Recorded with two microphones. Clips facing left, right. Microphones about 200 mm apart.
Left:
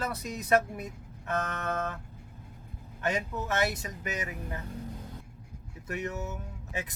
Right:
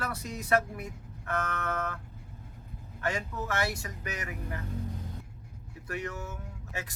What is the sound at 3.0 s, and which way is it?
Speech, 20° left (ahead or behind).